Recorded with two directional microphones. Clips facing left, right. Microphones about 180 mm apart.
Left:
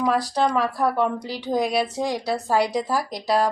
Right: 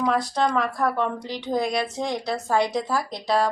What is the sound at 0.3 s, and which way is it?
Speech, 10° left (ahead or behind).